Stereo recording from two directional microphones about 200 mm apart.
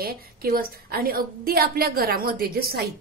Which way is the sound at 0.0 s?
50° right (ahead or behind).